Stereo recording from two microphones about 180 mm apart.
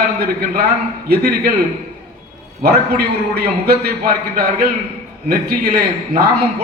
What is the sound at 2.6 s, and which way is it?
A man's voice, 60° right (ahead or behind).